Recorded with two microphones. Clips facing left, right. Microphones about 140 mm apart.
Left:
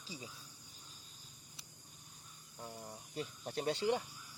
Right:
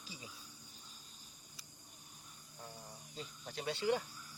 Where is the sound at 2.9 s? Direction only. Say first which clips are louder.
Left 6 dB; 55° left (ahead or behind).